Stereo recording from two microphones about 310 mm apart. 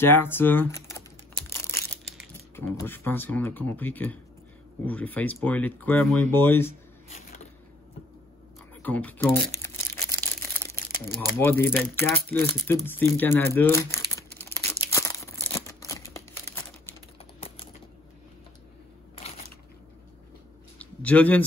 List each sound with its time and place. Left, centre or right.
0.0 s crumpling: centre
2.5 s speech: centre
8.8 s crumpling: centre
11.1 s speech: centre
12.8 s crumpling: centre
17.2 s typing: centre
20.8 s a sound: centre